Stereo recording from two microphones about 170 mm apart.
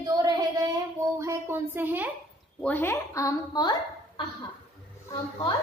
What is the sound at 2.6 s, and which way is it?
A woman's voice, 10° left (ahead or behind).